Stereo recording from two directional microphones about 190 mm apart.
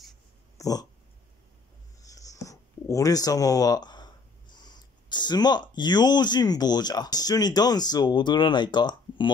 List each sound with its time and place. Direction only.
0.6 s dog: 20° left (ahead or behind)
2.0 s speech: 15° left (ahead or behind)